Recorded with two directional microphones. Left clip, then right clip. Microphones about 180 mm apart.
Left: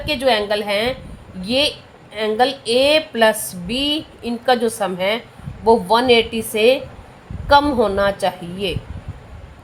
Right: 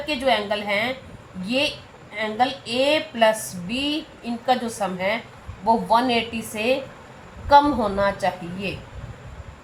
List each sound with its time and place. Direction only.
0.0 s a woman's voice: 50° left (ahead or behind)